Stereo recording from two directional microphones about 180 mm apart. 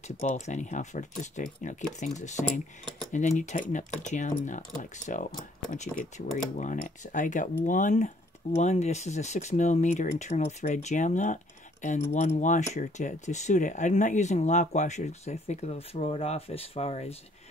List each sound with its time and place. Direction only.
0.2 s speech: 40° left (ahead or behind)